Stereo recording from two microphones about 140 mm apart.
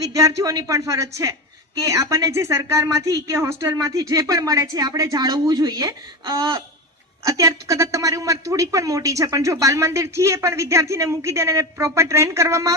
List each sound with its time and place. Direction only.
0.0 s a man's voice: 25° right (ahead or behind)